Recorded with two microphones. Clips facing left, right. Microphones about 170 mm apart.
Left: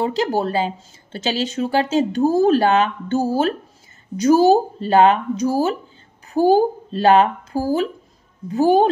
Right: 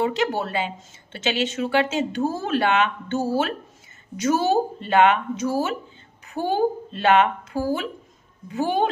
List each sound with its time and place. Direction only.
0.0 s speech: 35° left (ahead or behind)